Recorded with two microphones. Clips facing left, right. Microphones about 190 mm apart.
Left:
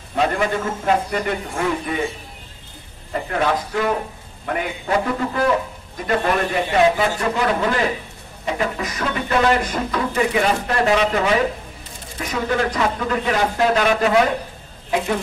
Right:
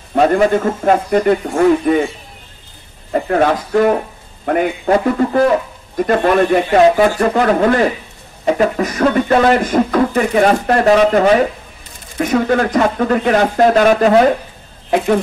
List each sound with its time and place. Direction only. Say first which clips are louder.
0.1 s speech: right 8 dB; 45° right (ahead or behind)
3.1 s speech: right 7 dB; 45° right (ahead or behind)